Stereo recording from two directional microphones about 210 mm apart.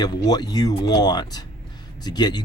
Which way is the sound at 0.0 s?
20° left (ahead or behind).